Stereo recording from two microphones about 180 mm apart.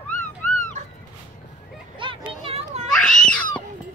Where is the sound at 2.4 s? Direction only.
35° right (ahead or behind).